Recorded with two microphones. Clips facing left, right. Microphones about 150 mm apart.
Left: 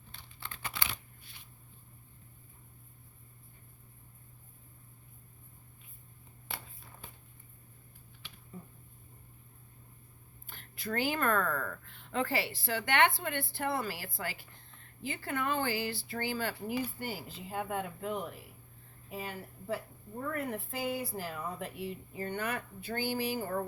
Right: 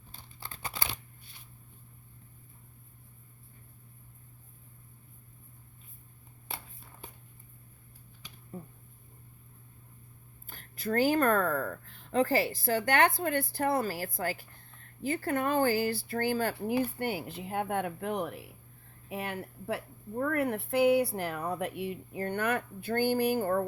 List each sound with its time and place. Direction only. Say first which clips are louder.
0.1 s crumpling: right 1 dB; 35° right (ahead or behind)
8.5 s a sound: right 5 dB; 50° right (ahead or behind)
10.4 s a woman's voice: right 6 dB; 40° right (ahead or behind)